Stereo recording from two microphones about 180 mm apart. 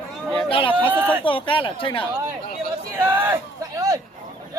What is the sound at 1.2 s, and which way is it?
Speech, 30° left (ahead or behind).